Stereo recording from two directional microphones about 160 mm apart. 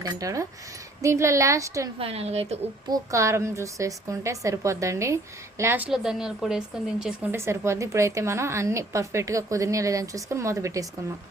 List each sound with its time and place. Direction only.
0.0 s a woman's voice: 20° right (ahead or behind)
2.0 s a woman's voice: 40° right (ahead or behind)
2.9 s a woman's voice: 20° right (ahead or behind); by 6.6 s 5° right (ahead or behind)
7.0 s a woman's voice: 15° right (ahead or behind)